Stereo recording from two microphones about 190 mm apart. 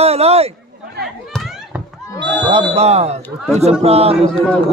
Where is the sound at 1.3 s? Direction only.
Centre (ahead or behind).